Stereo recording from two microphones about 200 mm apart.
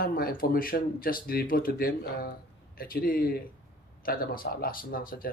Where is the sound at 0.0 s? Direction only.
45° left (ahead or behind).